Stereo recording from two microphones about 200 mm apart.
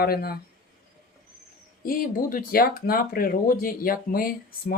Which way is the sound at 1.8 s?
45° left (ahead or behind).